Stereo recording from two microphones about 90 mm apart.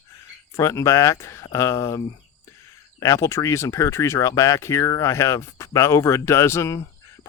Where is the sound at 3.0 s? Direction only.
35° left (ahead or behind).